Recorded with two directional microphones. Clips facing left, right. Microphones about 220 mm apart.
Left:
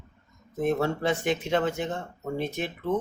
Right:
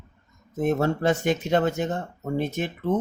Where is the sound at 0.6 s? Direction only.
45° right (ahead or behind).